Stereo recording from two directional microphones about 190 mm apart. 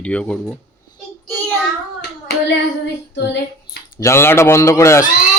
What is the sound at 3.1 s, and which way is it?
Female singing, 65° left (ahead or behind).